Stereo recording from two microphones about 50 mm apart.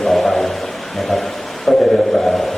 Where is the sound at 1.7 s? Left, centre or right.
Centre.